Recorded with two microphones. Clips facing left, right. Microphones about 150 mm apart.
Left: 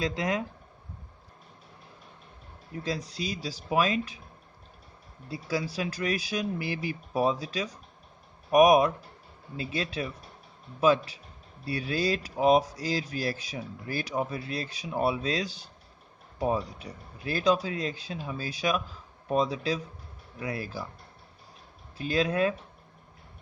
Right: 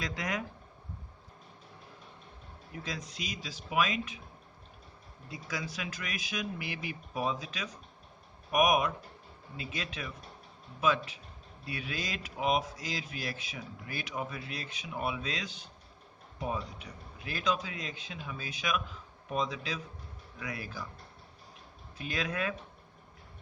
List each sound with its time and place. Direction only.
0.0 s speech: 25° left (ahead or behind)
2.8 s speech: 35° left (ahead or behind)
5.3 s speech: 30° left (ahead or behind)
21.9 s speech: 30° left (ahead or behind)